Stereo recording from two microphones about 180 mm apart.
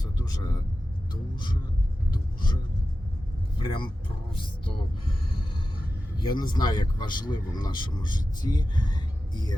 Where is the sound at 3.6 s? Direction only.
25° left (ahead or behind).